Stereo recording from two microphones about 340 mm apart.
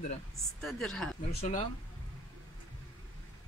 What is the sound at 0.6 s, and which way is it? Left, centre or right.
Speech, centre.